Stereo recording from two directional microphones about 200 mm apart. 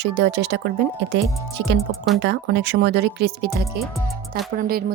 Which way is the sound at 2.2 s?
55° right (ahead or behind).